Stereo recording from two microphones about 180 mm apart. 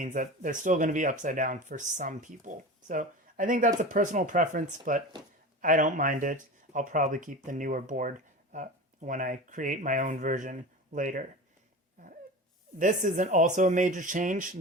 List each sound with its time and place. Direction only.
0.0 s speech: 45° right (ahead or behind)
12.8 s speech: 45° right (ahead or behind)